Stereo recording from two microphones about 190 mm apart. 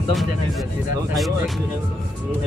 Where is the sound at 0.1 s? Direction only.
Centre (ahead or behind).